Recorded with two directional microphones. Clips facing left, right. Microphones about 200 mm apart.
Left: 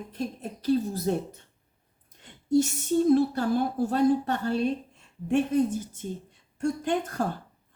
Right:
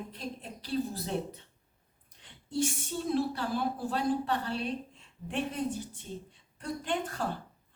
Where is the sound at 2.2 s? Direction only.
45° left (ahead or behind).